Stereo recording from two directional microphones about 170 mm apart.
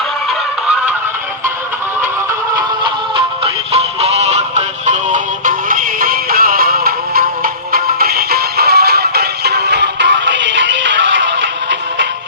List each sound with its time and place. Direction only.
2.6 s music: 30° right (ahead or behind); by 12.0 s 90° right